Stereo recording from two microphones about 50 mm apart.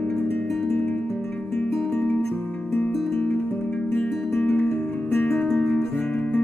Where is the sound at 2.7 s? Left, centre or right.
Left.